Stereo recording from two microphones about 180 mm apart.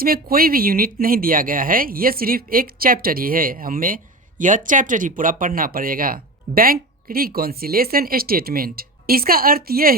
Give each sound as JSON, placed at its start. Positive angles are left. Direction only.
{"t": 0.0, "sound": "speech", "side_deg": -55}